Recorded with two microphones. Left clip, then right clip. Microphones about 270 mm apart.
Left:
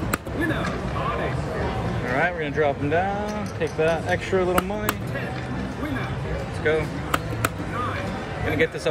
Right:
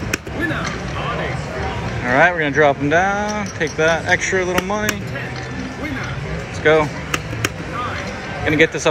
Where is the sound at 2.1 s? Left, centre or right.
Centre.